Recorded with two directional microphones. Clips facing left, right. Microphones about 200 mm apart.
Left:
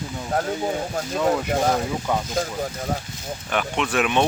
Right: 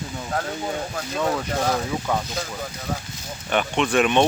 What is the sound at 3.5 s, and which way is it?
Speech, centre (ahead or behind).